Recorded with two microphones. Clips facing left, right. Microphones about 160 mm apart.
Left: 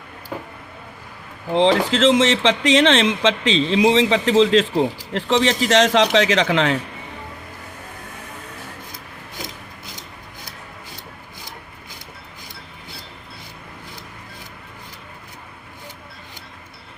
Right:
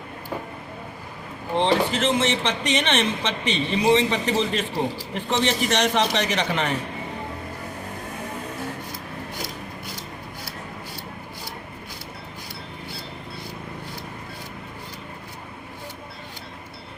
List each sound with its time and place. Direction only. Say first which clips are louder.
1.5 s speech: left 5 dB; 90° left